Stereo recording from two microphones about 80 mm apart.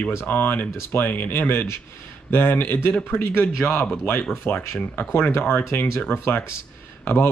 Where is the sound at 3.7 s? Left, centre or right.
Centre.